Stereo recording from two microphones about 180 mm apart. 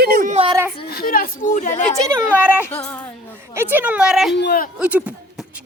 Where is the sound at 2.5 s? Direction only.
10° left (ahead or behind).